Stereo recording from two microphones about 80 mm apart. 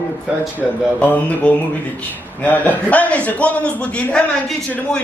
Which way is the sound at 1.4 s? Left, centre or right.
Centre.